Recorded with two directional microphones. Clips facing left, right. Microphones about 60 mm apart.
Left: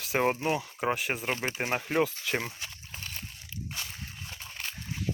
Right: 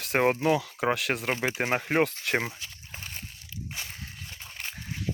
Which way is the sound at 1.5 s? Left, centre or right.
Right.